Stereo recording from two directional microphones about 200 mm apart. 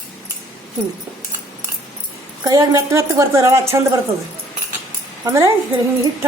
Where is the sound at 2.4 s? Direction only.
15° right (ahead or behind).